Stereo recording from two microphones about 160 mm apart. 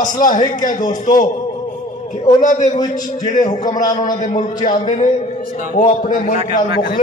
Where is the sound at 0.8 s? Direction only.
25° left (ahead or behind).